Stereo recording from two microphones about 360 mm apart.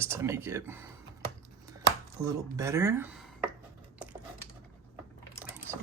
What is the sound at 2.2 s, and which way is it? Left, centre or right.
Speech, centre.